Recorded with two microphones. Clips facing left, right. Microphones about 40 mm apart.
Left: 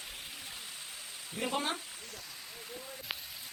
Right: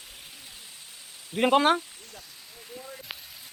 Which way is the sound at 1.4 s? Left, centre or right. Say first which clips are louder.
Right 13 dB; right.